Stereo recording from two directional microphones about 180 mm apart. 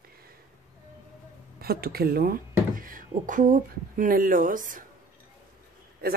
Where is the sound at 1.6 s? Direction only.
60° right (ahead or behind).